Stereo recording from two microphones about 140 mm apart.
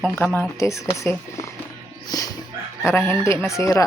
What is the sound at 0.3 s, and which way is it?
Speech, centre (ahead or behind).